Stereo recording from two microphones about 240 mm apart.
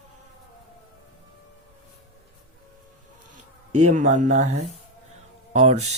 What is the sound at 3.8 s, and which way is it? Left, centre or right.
Speech, right.